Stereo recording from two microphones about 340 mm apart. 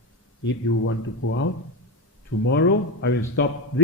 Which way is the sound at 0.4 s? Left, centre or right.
Left.